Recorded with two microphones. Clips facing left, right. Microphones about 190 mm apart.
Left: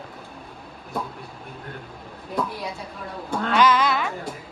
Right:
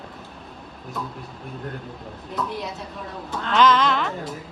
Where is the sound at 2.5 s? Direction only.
Centre (ahead or behind).